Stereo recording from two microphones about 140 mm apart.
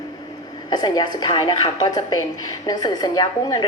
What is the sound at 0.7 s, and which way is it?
A woman's voice, 30° left (ahead or behind).